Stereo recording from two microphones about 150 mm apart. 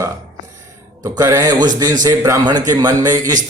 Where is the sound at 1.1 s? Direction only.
20° right (ahead or behind).